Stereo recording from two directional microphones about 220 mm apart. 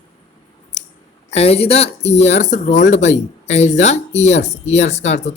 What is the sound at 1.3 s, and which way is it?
Speech, 30° left (ahead or behind).